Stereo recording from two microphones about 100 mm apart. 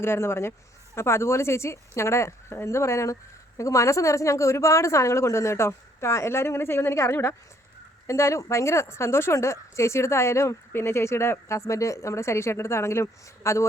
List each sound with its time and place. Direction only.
0.0 s speech: 25° left (ahead or behind)